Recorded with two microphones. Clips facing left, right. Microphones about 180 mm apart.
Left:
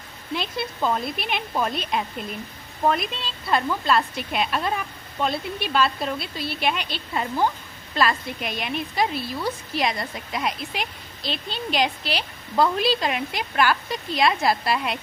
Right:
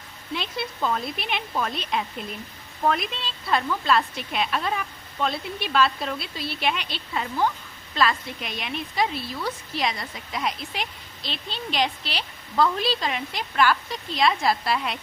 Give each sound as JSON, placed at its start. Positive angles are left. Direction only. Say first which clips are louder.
{"t": 0.3, "sound": "a woman's voice", "louder": "left 2 dB", "side_deg": 0}
{"t": 8.4, "sound": "a woman's voice", "louder": "left 4 dB", "side_deg": 5}
{"t": 9.9, "sound": "a woman's voice", "louder": "left 5 dB", "side_deg": 55}
{"t": 10.3, "sound": "a woman's voice", "louder": "left 1 dB", "side_deg": 5}